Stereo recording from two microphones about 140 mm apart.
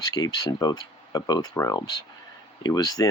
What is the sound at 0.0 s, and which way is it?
Speech, 30° left (ahead or behind).